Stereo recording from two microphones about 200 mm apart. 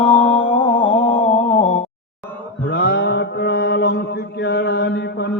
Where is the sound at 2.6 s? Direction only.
55° left (ahead or behind).